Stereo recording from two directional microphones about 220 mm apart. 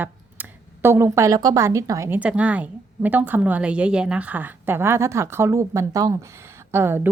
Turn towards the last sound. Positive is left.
turn(degrees=-10)  # may be behind; listen again after turning